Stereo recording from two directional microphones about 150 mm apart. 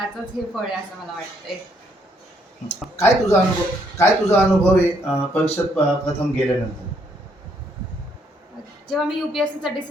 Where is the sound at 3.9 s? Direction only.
15° left (ahead or behind).